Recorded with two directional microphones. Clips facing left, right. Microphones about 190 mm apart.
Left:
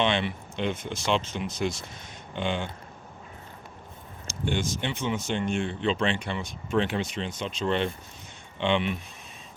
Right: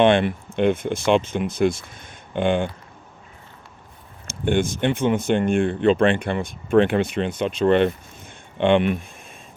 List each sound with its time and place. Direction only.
0.0 s speech: 50° right (ahead or behind)
4.3 s speech: 55° right (ahead or behind)